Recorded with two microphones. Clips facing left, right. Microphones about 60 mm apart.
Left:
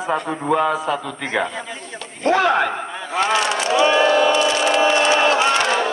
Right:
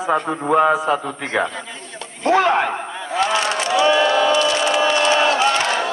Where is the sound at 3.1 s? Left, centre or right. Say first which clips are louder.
Even; left.